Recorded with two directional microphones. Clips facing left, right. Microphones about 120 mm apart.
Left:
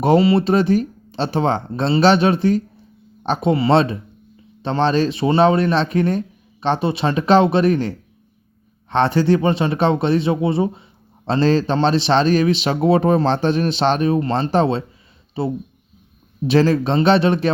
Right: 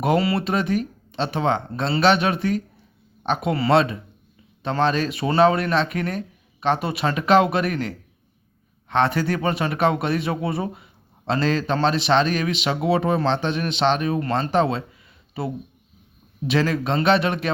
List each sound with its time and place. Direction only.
0.0 s speech: 30° left (ahead or behind)